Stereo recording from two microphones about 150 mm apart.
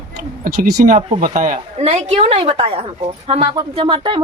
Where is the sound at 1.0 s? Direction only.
45° right (ahead or behind).